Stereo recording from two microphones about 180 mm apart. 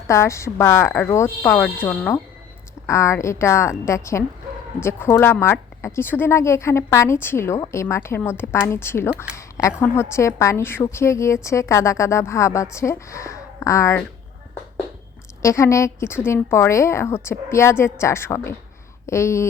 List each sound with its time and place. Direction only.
0.1 s a woman's voice: 15° left (ahead or behind)
15.4 s speech: 15° left (ahead or behind)